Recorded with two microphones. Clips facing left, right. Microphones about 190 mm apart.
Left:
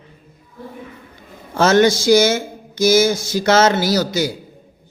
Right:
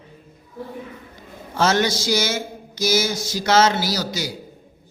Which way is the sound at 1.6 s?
50° left (ahead or behind).